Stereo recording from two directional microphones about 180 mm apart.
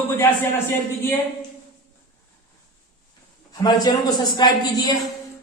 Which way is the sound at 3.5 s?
20° left (ahead or behind).